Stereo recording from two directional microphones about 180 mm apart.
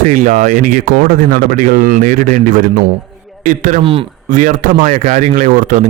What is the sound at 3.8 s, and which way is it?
Speech, 30° right (ahead or behind).